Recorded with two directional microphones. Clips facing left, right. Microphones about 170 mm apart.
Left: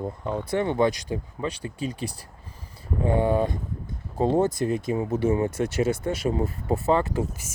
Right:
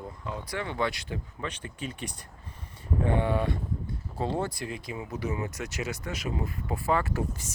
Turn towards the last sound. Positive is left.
turn(degrees=20)  # may be behind; listen again after turning